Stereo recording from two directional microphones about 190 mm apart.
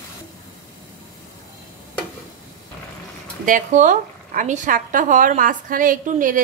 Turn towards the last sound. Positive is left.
turn(degrees=-45)  # may be behind; listen again after turning